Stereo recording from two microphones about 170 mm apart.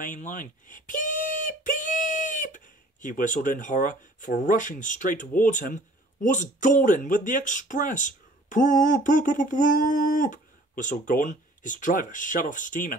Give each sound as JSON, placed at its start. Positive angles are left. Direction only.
{"t": 0.0, "sound": "speech", "side_deg": 50}